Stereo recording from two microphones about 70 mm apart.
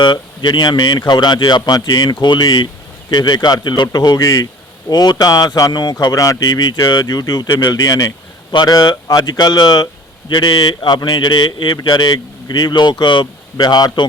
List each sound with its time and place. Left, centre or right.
0.0 s a man's voice: left
8.5 s speech: left
13.6 s speech: left